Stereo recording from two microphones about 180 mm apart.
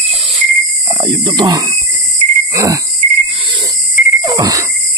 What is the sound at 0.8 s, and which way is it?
Speech, 25° right (ahead or behind).